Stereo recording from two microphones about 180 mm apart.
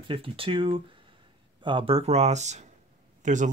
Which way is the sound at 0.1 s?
30° right (ahead or behind).